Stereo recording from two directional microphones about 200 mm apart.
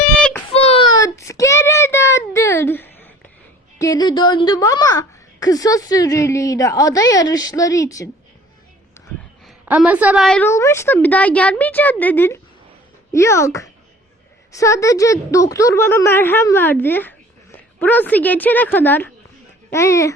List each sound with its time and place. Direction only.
0.0 s baby cry: 5° left (ahead or behind)
0.5 s a sound: 30° left (ahead or behind)
0.9 s child singing: 15° left (ahead or behind)
3.8 s a woman's voice: 20° left (ahead or behind)
9.0 s a sound: 15° left (ahead or behind)
9.5 s a woman's voice: 5° right (ahead or behind); by 20.1 s 15° left (ahead or behind)